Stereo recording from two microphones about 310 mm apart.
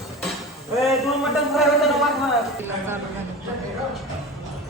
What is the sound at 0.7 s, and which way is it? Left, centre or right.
A man's voice, centre.